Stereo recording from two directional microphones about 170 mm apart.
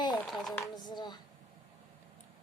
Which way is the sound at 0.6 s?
25° left (ahead or behind).